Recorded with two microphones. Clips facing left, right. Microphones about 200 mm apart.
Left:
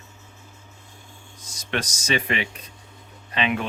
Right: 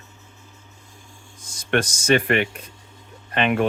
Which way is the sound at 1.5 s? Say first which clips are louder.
Right 7 dB; 55° right (ahead or behind).